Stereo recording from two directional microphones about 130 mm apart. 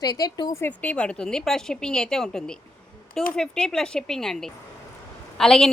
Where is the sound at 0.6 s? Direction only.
10° left (ahead or behind).